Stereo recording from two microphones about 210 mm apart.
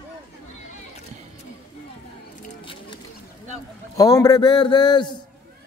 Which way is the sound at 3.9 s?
15° left (ahead or behind).